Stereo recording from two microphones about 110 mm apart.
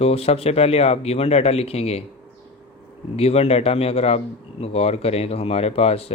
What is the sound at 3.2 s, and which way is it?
A man's voice, 70° left (ahead or behind).